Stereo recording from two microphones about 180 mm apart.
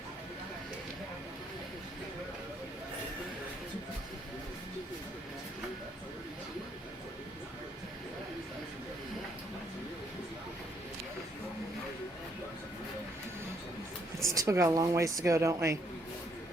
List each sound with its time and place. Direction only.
14.3 s speech: 15° right (ahead or behind)